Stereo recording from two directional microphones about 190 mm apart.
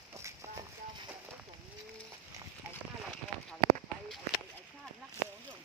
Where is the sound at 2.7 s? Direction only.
5° left (ahead or behind).